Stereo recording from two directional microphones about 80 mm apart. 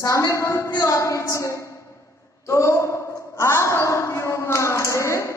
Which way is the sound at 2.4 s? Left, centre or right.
Left.